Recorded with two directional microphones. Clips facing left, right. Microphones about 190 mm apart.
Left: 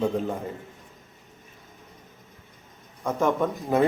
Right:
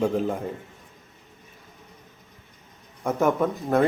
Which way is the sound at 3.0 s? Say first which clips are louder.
Right 2 dB; 5° right (ahead or behind).